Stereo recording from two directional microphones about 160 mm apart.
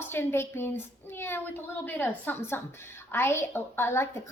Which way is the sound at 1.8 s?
15° left (ahead or behind).